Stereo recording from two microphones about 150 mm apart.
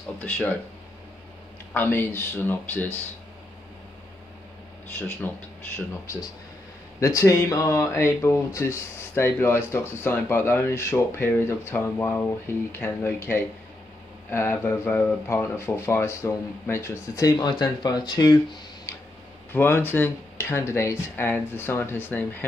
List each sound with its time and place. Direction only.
0.2 s speech: 10° left (ahead or behind)
1.7 s speech: 15° left (ahead or behind)
4.9 s speech: 15° left (ahead or behind)
7.0 s speech: 20° left (ahead or behind)
19.5 s speech: 15° left (ahead or behind)